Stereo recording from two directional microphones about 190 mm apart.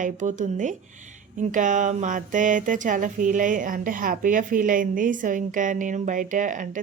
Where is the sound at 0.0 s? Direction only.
40° right (ahead or behind).